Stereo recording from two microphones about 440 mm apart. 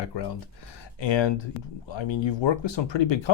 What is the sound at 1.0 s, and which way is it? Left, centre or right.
Speech, left.